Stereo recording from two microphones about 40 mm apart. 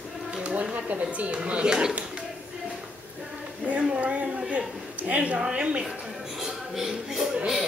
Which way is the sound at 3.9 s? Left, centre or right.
Right.